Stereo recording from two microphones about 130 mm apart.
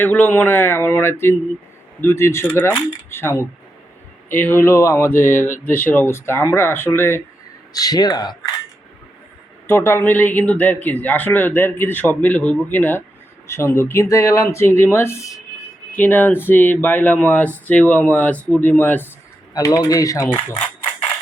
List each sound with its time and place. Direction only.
0.0 s speech: 15° left (ahead or behind)
5.1 s speech: 90° left
5.6 s speech: 15° left (ahead or behind)
7.7 s speech: 30° left (ahead or behind)
9.6 s speech: 20° left (ahead or behind)
19.5 s speech: 25° left (ahead or behind)